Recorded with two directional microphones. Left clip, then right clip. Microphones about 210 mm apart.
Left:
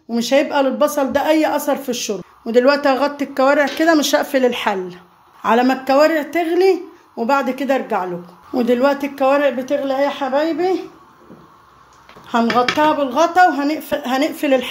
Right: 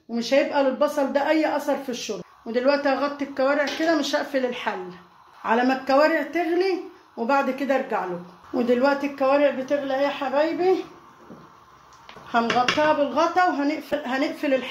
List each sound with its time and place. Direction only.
0.1 s a woman's voice: 50° left (ahead or behind)
5.4 s a woman's voice: 40° left (ahead or behind)
12.3 s a woman's voice: 50° left (ahead or behind)